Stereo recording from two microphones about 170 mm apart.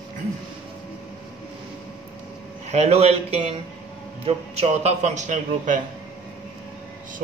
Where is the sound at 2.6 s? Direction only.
40° right (ahead or behind).